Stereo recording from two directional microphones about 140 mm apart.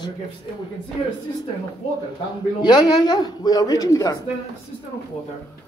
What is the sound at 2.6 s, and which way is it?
Speech, 30° left (ahead or behind).